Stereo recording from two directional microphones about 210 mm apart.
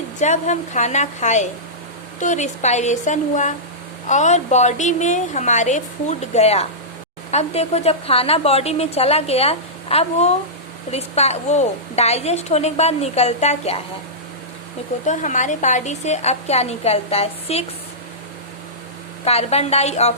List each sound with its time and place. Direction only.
0.2 s a woman's voice: 35° left (ahead or behind)
15.0 s a woman's voice: 35° left (ahead or behind)
19.2 s speech: 30° left (ahead or behind)